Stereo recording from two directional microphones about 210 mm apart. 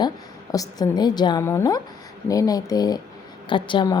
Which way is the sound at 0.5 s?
15° left (ahead or behind).